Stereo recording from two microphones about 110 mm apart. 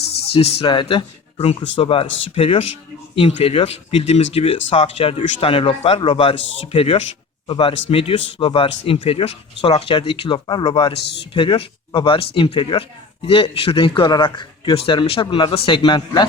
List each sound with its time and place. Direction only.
0.3 s speech: 55° left (ahead or behind)
7.4 s a man's voice: 55° left (ahead or behind)